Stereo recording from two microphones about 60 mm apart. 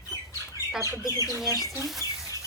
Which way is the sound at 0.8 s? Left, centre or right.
Right.